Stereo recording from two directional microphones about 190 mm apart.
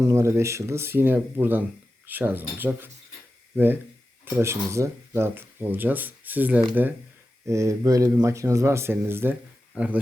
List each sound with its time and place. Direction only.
0.0 s speech: 15° right (ahead or behind)